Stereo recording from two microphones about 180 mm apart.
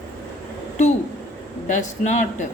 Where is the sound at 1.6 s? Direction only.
40° left (ahead or behind).